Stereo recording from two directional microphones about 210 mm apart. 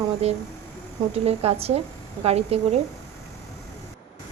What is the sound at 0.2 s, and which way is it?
A woman's voice, 30° right (ahead or behind).